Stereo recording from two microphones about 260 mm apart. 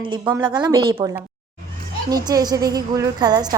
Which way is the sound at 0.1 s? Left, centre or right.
Centre.